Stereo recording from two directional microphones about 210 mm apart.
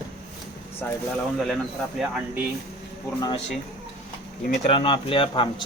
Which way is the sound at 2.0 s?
5° right (ahead or behind).